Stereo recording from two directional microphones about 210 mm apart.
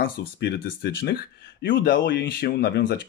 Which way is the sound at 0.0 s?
50° left (ahead or behind).